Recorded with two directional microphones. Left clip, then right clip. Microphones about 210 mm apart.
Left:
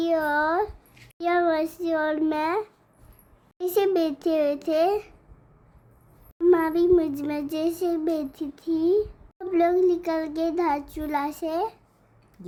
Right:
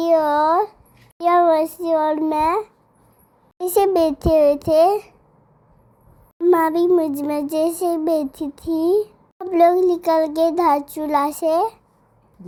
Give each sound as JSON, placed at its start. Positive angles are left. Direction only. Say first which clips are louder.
{"t": 0.0, "sound": "a sound", "louder": "right 7 dB", "side_deg": -15}
{"t": 3.6, "sound": "a child's voice", "louder": "right 6 dB", "side_deg": -20}
{"t": 6.4, "sound": "a child's voice", "louder": "right 4 dB", "side_deg": -20}